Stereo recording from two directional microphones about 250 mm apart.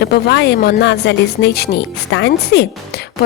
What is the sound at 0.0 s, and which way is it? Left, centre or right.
Speech, left.